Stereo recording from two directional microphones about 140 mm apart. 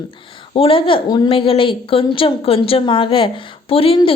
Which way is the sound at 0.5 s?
40° left (ahead or behind).